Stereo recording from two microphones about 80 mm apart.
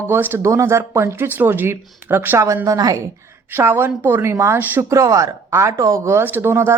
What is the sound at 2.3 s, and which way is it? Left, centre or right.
Speech, right.